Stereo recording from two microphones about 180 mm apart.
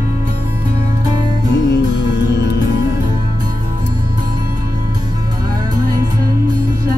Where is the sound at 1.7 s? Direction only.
70° left (ahead or behind).